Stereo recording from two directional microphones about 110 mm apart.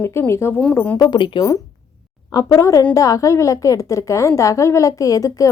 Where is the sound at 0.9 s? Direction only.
40° left (ahead or behind).